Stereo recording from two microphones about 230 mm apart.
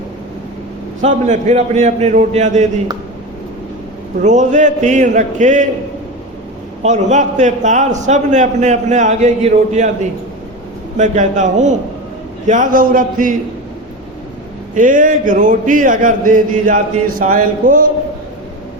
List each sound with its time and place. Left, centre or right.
1.0 s a man's voice: right
4.2 s a man's voice: right
6.8 s a man's voice: right
10.9 s a man's voice: right
14.8 s a man's voice: right